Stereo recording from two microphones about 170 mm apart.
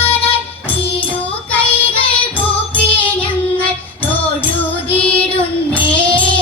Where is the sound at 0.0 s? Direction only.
35° left (ahead or behind).